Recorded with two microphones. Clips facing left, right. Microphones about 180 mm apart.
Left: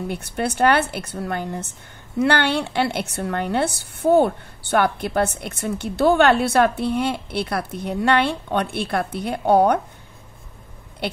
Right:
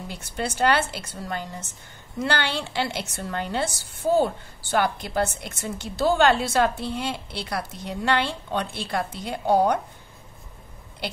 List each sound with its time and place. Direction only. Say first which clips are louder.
0.1 s speech: left 5 dB; 60° left (ahead or behind)